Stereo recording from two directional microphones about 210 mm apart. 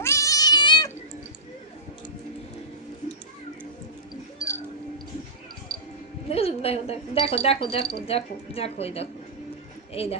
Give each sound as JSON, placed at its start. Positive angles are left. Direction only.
{"t": 0.0, "sound": "cat", "side_deg": 15}
{"t": 4.4, "sound": "a sound", "side_deg": 15}
{"t": 6.2, "sound": "a woman's voice", "side_deg": 30}